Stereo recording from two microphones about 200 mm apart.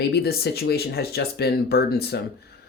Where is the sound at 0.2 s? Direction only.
50° left (ahead or behind).